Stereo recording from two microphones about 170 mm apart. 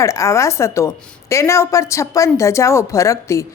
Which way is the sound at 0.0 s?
15° left (ahead or behind).